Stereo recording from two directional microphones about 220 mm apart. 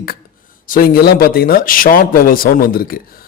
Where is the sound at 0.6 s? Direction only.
40° left (ahead or behind).